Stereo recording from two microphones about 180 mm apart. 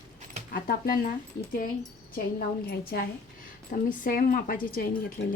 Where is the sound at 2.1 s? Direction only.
55° left (ahead or behind).